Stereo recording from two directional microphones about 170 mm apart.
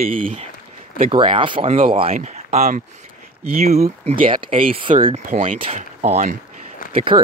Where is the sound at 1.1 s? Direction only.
30° right (ahead or behind).